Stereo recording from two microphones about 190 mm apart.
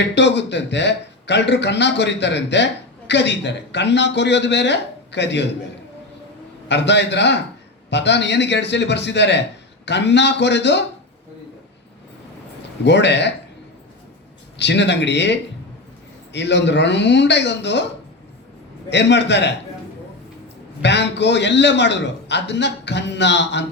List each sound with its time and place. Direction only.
0.0 s a man's voice: 65° left (ahead or behind)
6.7 s speech: 65° left (ahead or behind)
12.8 s speech: 65° left (ahead or behind)
14.6 s speech: 65° left (ahead or behind)
18.9 s a man's voice: 65° left (ahead or behind)
20.8 s a man's voice: 65° left (ahead or behind)